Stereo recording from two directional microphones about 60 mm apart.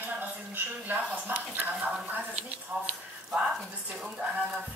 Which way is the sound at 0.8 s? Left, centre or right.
Right.